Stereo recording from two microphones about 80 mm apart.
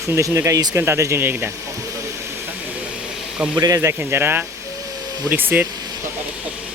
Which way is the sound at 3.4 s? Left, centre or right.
Centre.